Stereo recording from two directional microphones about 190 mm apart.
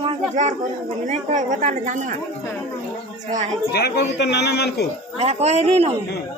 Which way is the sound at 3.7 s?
60° left (ahead or behind).